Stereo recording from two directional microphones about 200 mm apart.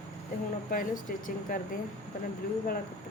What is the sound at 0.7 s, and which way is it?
Speech, 45° left (ahead or behind).